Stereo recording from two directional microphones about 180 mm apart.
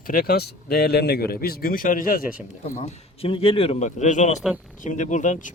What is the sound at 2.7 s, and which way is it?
Speech, 35° left (ahead or behind).